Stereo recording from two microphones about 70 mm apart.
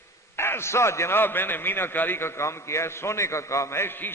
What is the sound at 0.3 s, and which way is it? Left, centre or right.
A man's voice, left.